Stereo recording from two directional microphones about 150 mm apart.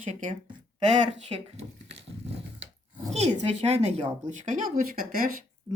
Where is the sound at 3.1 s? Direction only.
45° right (ahead or behind).